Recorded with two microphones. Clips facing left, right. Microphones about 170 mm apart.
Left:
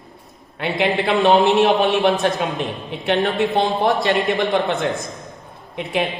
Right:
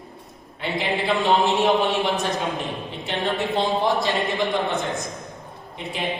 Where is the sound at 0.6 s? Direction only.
65° left (ahead or behind).